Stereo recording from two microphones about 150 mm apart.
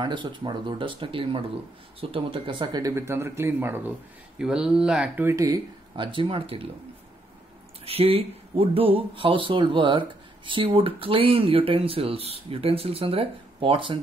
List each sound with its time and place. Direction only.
0.0 s speech: 30° right (ahead or behind)
5.9 s speech: 35° right (ahead or behind)
7.8 s speech: 40° right (ahead or behind)